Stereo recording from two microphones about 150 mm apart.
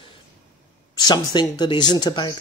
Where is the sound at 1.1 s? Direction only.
30° left (ahead or behind).